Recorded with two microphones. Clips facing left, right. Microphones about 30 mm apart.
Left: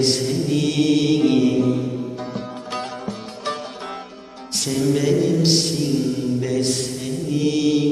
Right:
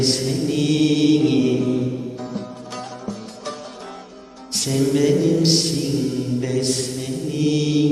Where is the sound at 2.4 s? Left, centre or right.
Left.